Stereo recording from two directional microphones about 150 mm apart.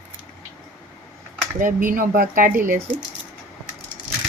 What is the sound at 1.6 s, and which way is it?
Speech, 65° right (ahead or behind).